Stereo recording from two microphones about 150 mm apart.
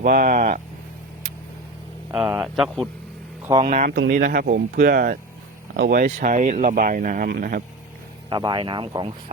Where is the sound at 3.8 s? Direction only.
60° right (ahead or behind).